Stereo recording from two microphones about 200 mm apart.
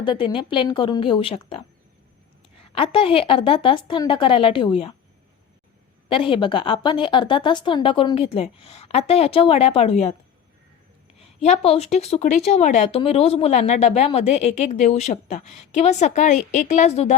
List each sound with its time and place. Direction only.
0.0 s speech: 25° left (ahead or behind)
6.1 s speech: 25° left (ahead or behind)
11.2 s a woman's voice: 35° left (ahead or behind)